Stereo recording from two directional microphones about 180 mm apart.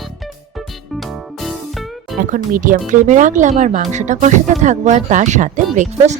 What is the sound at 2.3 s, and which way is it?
Speech, 50° right (ahead or behind).